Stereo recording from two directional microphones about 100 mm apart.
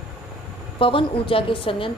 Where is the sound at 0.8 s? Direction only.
65° left (ahead or behind).